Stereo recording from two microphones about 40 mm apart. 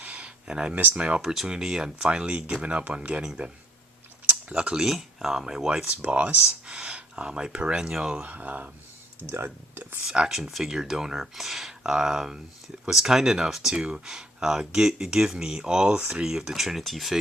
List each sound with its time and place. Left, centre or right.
0.0 s a sound: right
0.9 s speech: right
1.2 s speech: centre
2.0 s speech: right
3.4 s speech: right
4.5 s speech: right
4.8 s speech: centre
5.9 s speech: right
6.7 s speech: centre
8.2 s speech: right
9.3 s speech: right
10.2 s speech: centre
16.2 s speech: centre